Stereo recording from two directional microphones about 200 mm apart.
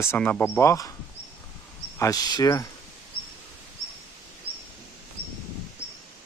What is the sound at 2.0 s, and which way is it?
Speech, 20° left (ahead or behind).